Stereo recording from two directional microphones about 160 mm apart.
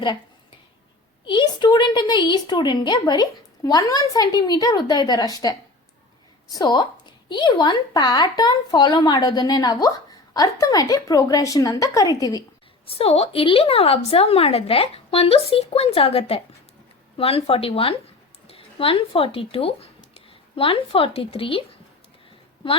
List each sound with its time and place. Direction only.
1.2 s a woman's voice: 30° left (ahead or behind)
12.9 s a woman's voice: 40° left (ahead or behind)